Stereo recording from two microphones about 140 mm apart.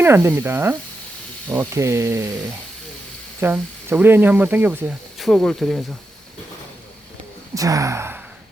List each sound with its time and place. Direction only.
0.0 s speech: 15° right (ahead or behind)
3.4 s speech: 15° right (ahead or behind)
5.2 s speech: 5° left (ahead or behind)
7.5 s speech: 25° right (ahead or behind)